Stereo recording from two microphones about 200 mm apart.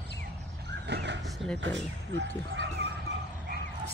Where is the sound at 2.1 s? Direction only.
60° right (ahead or behind).